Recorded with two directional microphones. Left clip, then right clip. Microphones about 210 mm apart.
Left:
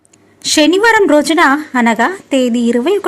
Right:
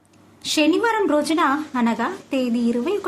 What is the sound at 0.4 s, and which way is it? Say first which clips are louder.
A woman's voice: left 9 dB; 30° left (ahead or behind).